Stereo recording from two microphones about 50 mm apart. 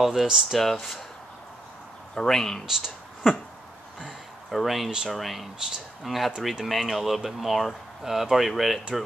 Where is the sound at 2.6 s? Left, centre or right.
Centre.